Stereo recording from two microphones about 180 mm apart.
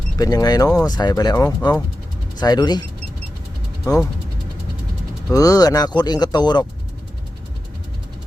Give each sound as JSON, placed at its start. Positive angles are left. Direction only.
{"t": 0.2, "sound": "speech", "side_deg": 20}
{"t": 5.3, "sound": "speech", "side_deg": 20}